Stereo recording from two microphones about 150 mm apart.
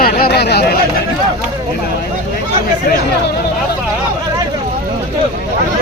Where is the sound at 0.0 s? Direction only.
90° left.